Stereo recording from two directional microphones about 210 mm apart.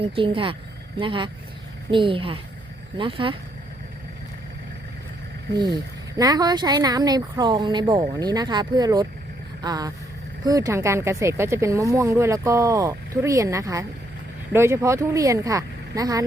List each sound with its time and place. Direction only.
0.0 s speech: 25° right (ahead or behind)
5.5 s speech: 20° right (ahead or behind)